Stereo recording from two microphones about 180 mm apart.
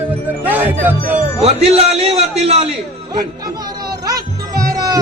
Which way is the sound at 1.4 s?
35° right (ahead or behind).